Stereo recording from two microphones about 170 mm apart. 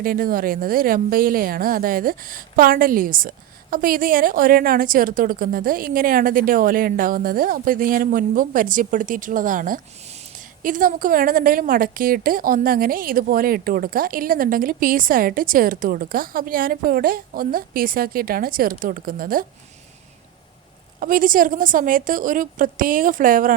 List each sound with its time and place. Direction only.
0.0 s speech: 55° right (ahead or behind)
21.0 s a woman's voice: 55° right (ahead or behind)